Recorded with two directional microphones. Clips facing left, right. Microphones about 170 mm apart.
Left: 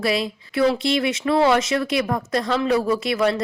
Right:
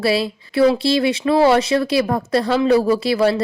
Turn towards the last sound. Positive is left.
turn(degrees=-30)  # may be behind; listen again after turning